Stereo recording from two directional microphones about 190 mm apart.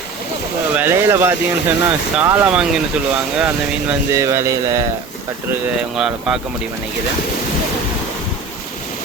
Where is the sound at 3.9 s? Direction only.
15° right (ahead or behind).